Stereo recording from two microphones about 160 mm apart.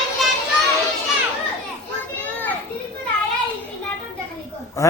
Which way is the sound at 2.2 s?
10° left (ahead or behind).